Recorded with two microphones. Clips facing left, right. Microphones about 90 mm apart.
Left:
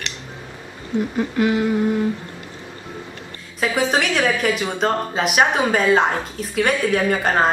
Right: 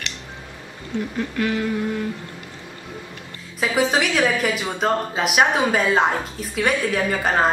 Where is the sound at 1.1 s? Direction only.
20° left (ahead or behind).